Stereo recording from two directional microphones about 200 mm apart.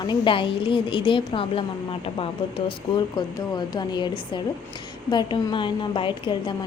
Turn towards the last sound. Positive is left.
turn(degrees=25)  # may be behind; listen again after turning